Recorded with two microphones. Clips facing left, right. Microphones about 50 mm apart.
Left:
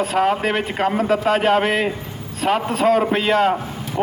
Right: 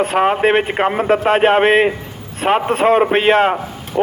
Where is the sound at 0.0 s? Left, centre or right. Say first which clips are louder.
Right 4 dB; right.